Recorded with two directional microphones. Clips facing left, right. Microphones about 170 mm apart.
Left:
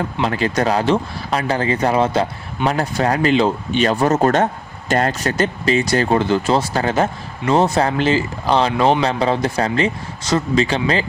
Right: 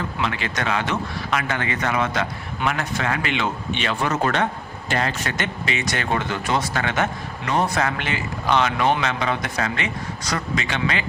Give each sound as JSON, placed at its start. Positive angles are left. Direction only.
{"t": 0.2, "sound": "speech", "side_deg": 40}